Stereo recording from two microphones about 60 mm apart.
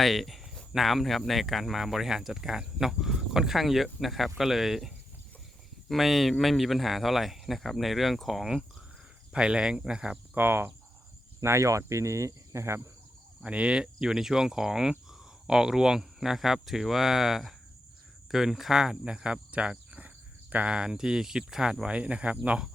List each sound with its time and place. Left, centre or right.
0.0 s speech: centre
9.3 s speech: centre
10.3 s cricket: right
11.4 s speech: right
13.4 s speech: centre
20.7 s speech: centre